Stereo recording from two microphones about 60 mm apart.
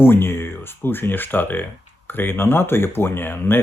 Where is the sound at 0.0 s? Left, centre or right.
Left.